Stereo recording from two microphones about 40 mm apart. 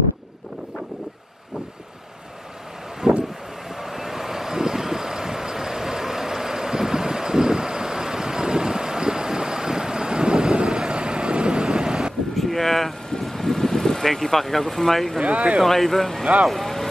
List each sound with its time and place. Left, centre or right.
3.0 s vehicle: centre
12.4 s a sound: centre
13.2 s vehicle: centre
15.2 s speech: right
15.6 s speech: centre